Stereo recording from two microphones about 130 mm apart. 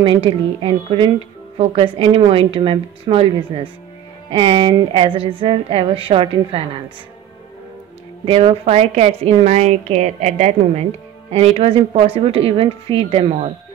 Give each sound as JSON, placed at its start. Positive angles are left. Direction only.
{"t": 0.0, "sound": "a woman's voice", "side_deg": -45}
{"t": 8.3, "sound": "a woman's voice", "side_deg": -45}